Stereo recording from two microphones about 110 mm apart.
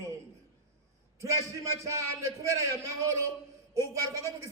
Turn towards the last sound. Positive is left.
turn(degrees=-30)  # may be behind; listen again after turning